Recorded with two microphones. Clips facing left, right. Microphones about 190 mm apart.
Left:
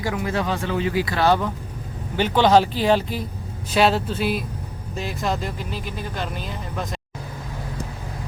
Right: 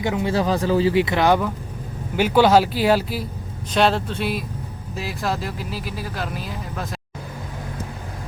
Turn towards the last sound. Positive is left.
turn(degrees=-5)  # may be behind; listen again after turning